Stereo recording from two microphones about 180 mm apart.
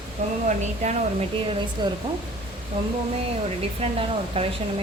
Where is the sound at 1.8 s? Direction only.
25° right (ahead or behind).